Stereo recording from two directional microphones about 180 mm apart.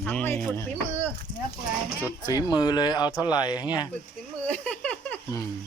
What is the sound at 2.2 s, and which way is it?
Speech, 25° left (ahead or behind).